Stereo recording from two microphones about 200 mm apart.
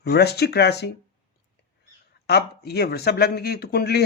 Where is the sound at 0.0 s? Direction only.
55° left (ahead or behind).